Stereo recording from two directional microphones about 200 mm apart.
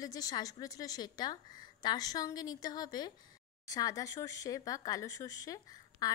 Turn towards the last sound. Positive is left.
turn(degrees=15)  # may be behind; listen again after turning